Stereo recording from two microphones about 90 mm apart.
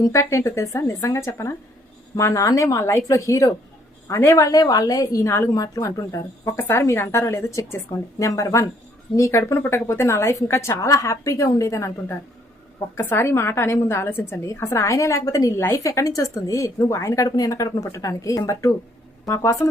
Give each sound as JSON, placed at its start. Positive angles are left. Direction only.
{"t": 0.0, "sound": "a woman's voice", "side_deg": 35}
{"t": 5.5, "sound": "a woman's voice", "side_deg": 40}
{"t": 6.6, "sound": "a woman's voice", "side_deg": 30}
{"t": 13.1, "sound": "a woman's voice", "side_deg": 30}